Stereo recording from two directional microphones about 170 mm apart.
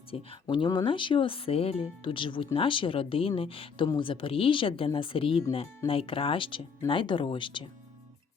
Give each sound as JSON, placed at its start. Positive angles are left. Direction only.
{"t": 0.1, "sound": "speech", "side_deg": 35}